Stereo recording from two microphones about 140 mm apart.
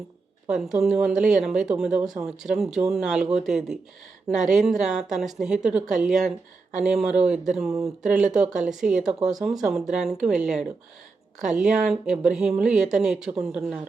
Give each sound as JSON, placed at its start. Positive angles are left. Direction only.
{"t": 0.4, "sound": "speech", "side_deg": -5}
{"t": 4.4, "sound": "a woman's voice", "side_deg": -60}
{"t": 4.6, "sound": "speech", "side_deg": -5}